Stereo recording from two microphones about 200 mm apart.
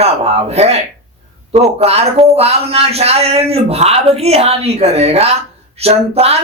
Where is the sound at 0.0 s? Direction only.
30° right (ahead or behind).